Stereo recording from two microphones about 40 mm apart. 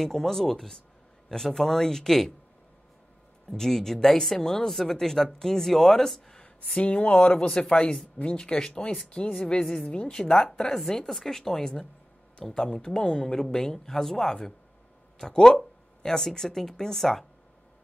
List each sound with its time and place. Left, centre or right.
0.0 s speech: centre
3.4 s speech: centre
6.4 s speech: left; by 17.3 s centre